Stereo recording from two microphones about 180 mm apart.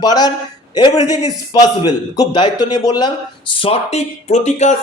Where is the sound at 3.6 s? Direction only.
35° left (ahead or behind).